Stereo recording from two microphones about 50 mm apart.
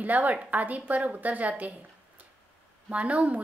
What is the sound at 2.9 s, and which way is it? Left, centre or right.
Speech, right.